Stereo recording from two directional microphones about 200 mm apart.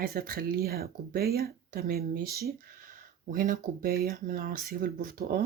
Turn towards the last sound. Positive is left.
turn(degrees=-45)  # may be behind; listen again after turning